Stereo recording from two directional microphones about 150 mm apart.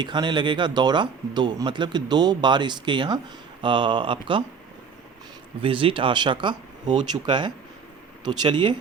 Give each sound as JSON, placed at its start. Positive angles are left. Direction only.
{"t": 0.0, "sound": "speech", "side_deg": -30}
{"t": 5.6, "sound": "speech", "side_deg": -35}